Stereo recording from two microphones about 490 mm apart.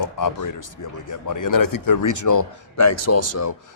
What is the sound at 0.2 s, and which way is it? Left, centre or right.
Speech, left.